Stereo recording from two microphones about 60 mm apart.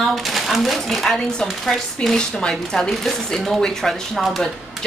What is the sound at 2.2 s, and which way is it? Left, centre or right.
A woman's voice, centre.